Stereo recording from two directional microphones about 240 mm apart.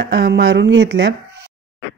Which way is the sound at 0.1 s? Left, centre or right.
Right.